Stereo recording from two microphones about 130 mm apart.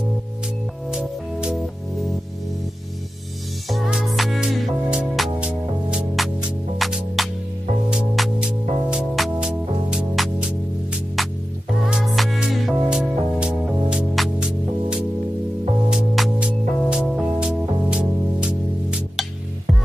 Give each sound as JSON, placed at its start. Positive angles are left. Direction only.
{"t": 0.8, "sound": "music", "side_deg": -5}
{"t": 3.6, "sound": "music", "side_deg": 0}